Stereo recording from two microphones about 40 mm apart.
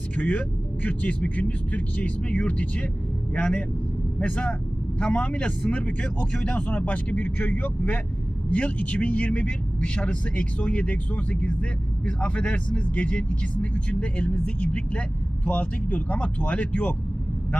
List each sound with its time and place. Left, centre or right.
0.2 s a man's voice: left